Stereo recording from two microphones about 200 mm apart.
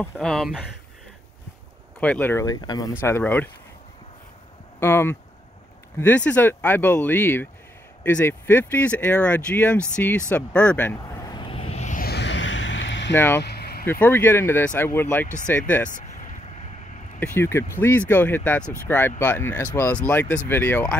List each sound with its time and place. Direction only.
0.0 s speech: 5° left (ahead or behind)
2.0 s speech: 5° left (ahead or behind)
4.7 s speech: 10° left (ahead or behind)
10.3 s a sound: 5° left (ahead or behind); by 13.1 s 65° left (ahead or behind)
13.1 s speech: 10° left (ahead or behind)
13.4 s vehicle: 55° left (ahead or behind)
13.8 s speech: 10° left (ahead or behind)
17.2 s speech: 10° left (ahead or behind)